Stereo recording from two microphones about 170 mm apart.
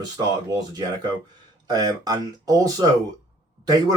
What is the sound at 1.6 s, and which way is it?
Speech, 25° right (ahead or behind).